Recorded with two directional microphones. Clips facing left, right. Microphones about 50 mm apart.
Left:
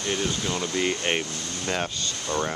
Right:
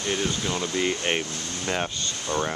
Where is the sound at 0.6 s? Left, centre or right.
Centre.